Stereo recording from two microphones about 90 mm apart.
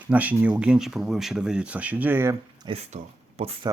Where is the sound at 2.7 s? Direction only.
60° right (ahead or behind).